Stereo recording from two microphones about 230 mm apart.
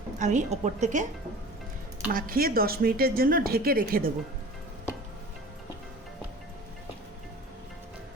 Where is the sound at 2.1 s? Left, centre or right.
Right.